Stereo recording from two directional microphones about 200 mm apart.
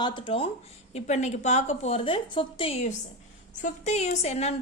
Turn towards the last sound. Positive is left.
turn(degrees=35)  # may be behind; listen again after turning